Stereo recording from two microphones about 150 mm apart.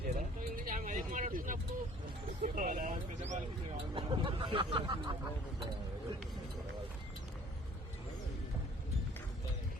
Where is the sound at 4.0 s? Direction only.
35° right (ahead or behind).